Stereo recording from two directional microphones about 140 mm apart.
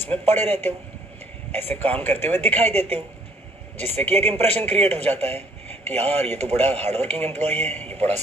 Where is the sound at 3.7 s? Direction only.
50° right (ahead or behind).